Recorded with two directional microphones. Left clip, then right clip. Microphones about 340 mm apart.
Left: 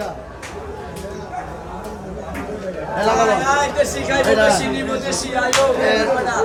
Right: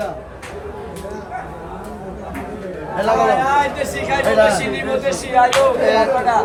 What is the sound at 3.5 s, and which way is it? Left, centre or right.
Speech, centre.